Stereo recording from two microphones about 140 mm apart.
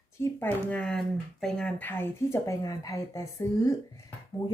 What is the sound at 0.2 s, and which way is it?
Speech, 15° left (ahead or behind).